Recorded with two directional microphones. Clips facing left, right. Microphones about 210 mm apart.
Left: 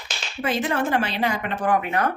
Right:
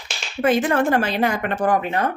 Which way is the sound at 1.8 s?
30° right (ahead or behind).